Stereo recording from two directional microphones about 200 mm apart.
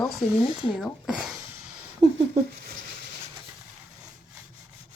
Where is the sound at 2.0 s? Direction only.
20° right (ahead or behind).